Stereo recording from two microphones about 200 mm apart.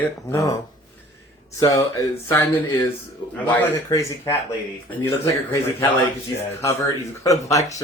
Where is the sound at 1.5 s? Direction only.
15° left (ahead or behind).